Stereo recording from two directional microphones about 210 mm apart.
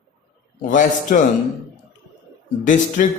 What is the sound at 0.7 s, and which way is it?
Speech, 40° left (ahead or behind).